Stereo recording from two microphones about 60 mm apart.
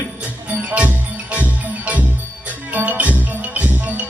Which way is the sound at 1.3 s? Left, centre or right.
Right.